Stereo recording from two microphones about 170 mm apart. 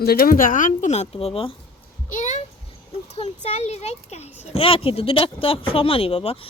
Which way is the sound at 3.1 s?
40° left (ahead or behind).